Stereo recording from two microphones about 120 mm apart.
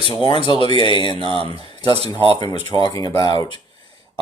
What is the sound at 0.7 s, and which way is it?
Speech, 50° right (ahead or behind).